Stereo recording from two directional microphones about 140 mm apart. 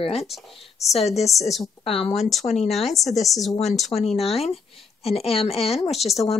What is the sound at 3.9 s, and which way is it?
A woman's voice, 50° left (ahead or behind).